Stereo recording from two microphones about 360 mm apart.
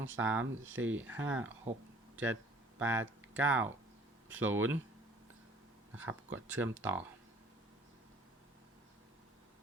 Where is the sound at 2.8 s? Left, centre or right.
Centre.